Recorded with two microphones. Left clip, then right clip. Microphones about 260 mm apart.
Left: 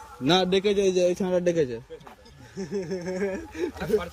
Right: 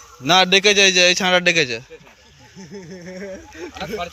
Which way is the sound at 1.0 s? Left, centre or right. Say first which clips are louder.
Right 9 dB; right.